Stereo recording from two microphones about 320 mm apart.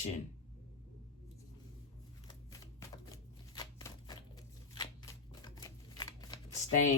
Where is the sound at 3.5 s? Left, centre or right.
Centre.